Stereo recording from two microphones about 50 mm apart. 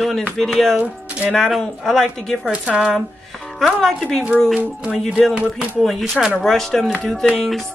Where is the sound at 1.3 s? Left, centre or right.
Centre.